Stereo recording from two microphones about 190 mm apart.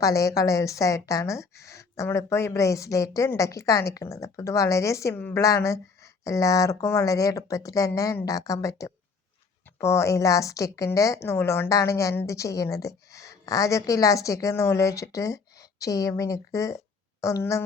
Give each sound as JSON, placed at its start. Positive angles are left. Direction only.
{"t": 0.0, "sound": "a woman's voice", "side_deg": 15}